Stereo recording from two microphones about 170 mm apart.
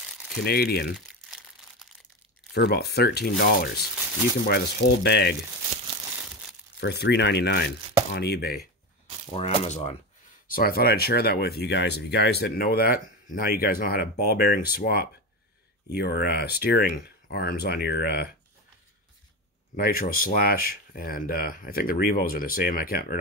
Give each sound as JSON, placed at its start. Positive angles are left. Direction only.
{"t": 0.4, "sound": "speech", "side_deg": 65}
{"t": 2.5, "sound": "speech", "side_deg": 70}
{"t": 6.8, "sound": "speech", "side_deg": 80}
{"t": 9.3, "sound": "speech", "side_deg": 40}
{"t": 10.5, "sound": "speech", "side_deg": 60}
{"t": 19.7, "sound": "speech", "side_deg": 60}